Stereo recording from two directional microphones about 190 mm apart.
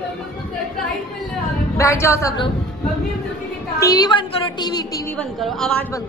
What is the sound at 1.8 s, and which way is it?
Speech, 15° left (ahead or behind).